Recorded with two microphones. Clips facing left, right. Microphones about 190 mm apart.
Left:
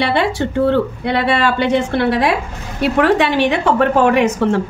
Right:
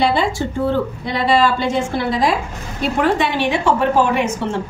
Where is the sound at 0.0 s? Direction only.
65° left (ahead or behind).